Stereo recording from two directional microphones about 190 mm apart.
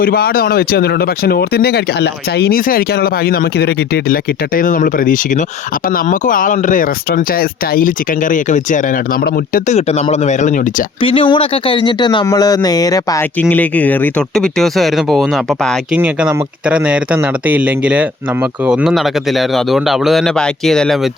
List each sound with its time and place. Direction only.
0.0 s speech: 50° left (ahead or behind)
11.0 s a man's voice: 25° left (ahead or behind); by 21.1 s centre (ahead or behind)